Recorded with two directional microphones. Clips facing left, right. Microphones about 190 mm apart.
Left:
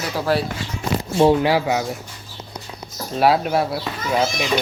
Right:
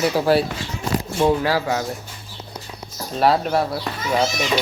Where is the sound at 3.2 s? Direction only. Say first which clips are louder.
Left 1 dB; 5° left (ahead or behind).